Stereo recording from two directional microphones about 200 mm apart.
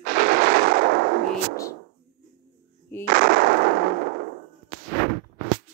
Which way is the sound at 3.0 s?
45° right (ahead or behind).